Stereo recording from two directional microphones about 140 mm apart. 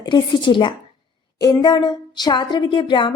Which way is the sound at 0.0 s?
35° left (ahead or behind).